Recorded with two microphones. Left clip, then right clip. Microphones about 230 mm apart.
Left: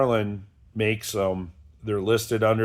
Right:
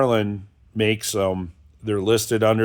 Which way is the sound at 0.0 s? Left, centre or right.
Right.